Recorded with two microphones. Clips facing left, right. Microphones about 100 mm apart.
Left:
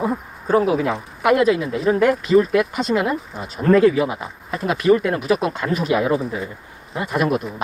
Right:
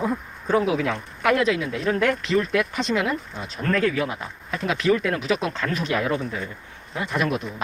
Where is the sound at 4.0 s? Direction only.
5° left (ahead or behind).